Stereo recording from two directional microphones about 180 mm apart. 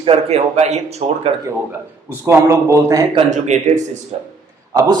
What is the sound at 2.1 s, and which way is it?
Speech, 15° right (ahead or behind).